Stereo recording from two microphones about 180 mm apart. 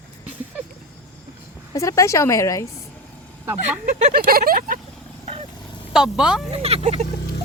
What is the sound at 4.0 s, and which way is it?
Speech, 55° right (ahead or behind).